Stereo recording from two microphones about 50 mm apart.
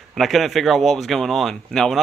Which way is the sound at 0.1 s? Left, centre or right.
Centre.